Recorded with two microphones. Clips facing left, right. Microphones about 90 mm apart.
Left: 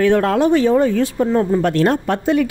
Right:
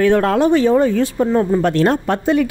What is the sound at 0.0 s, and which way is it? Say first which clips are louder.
Speech: right 1 dB; 40° right (ahead or behind).